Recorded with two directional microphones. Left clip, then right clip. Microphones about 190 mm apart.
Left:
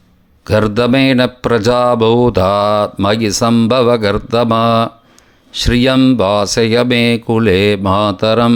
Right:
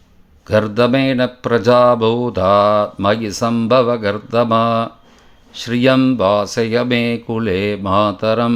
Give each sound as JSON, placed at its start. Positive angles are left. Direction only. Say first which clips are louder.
{"t": 0.4, "sound": "speech", "louder": "left 2 dB", "side_deg": 30}